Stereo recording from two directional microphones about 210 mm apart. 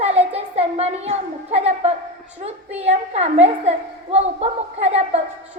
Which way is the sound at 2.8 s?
30° right (ahead or behind).